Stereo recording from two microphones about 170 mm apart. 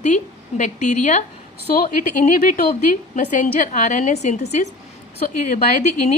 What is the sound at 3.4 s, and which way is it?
Speech, 50° left (ahead or behind).